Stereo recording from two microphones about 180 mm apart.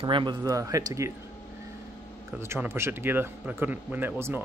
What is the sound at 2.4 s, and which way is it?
Speech, 15° right (ahead or behind).